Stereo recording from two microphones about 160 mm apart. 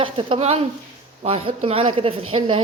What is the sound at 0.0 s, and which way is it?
A woman's voice, 35° right (ahead or behind).